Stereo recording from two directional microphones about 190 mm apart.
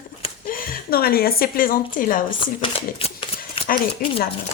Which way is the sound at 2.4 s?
30° left (ahead or behind).